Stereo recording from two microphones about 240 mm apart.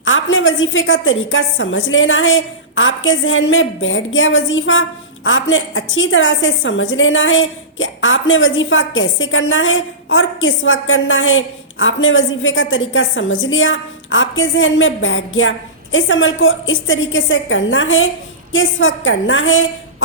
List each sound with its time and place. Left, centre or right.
0.0 s a woman's voice: left